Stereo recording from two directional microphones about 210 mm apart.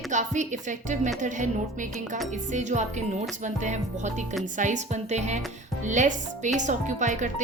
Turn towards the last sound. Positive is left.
turn(degrees=-35)  # may be behind; listen again after turning